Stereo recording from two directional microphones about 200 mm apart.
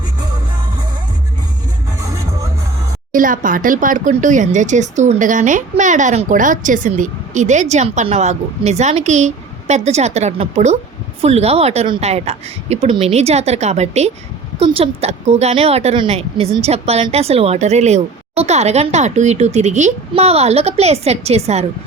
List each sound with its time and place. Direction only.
2.0 s music: 15° right (ahead or behind)
3.1 s speech: 45° right (ahead or behind)